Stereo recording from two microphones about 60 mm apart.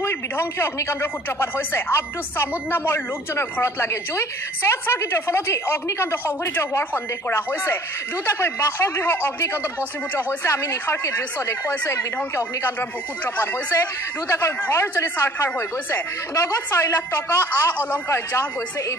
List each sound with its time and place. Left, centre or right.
0.0 s speech: left
13.2 s speech: left
14.2 s speech: left
16.4 s speech: left